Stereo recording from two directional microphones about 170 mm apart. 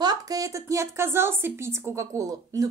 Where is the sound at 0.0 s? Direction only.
20° right (ahead or behind).